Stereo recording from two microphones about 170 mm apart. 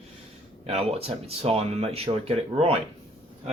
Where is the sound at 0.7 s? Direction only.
35° right (ahead or behind).